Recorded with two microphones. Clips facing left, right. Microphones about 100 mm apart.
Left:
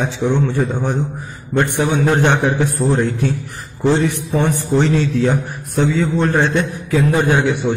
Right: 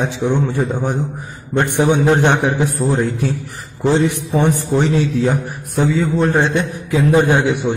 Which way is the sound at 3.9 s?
15° right (ahead or behind).